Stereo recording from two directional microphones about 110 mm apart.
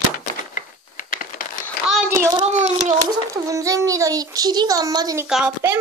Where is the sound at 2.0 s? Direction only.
20° right (ahead or behind).